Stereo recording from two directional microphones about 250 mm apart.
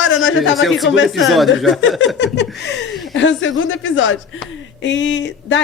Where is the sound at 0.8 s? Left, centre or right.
Left.